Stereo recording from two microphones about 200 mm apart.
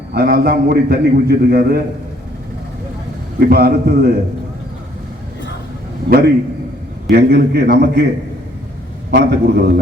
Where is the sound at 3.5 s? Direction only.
50° right (ahead or behind).